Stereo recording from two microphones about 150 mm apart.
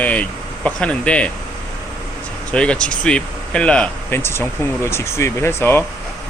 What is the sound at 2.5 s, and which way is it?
Speech, 5° left (ahead or behind).